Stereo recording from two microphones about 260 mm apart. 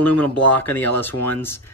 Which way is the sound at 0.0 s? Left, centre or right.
Centre.